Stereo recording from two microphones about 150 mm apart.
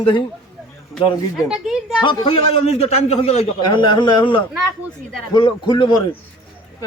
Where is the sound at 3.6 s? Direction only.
30° left (ahead or behind).